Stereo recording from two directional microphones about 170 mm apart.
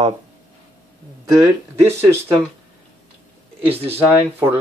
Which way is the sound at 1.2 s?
20° right (ahead or behind).